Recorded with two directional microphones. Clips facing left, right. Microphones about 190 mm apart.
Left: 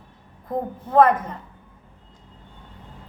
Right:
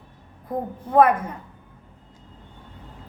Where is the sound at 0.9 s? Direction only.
10° right (ahead or behind).